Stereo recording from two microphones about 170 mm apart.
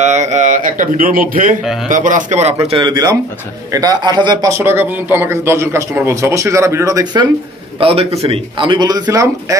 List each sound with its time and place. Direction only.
0.0 s a man's voice: 45° right (ahead or behind)
2.6 s speech: 30° right (ahead or behind)
7.8 s speech: 35° right (ahead or behind); by 9.6 s 20° right (ahead or behind)